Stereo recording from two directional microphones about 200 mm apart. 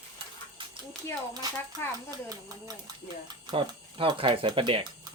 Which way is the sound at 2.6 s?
20° right (ahead or behind).